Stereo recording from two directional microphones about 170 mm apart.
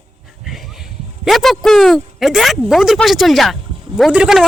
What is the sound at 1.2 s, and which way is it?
Speech, centre (ahead or behind).